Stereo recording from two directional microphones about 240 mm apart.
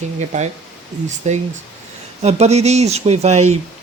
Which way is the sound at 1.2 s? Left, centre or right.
Right.